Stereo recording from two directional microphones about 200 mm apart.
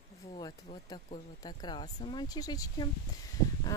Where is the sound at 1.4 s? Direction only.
20° left (ahead or behind).